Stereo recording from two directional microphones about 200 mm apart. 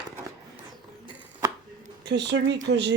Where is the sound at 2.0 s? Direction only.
60° right (ahead or behind).